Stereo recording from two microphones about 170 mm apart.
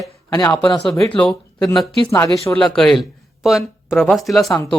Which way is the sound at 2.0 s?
20° left (ahead or behind).